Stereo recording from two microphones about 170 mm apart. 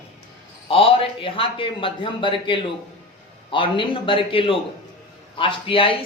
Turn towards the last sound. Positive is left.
turn(degrees=30)  # may be behind; listen again after turning